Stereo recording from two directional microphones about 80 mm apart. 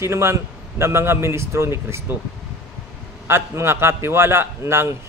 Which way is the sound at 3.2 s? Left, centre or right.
Right.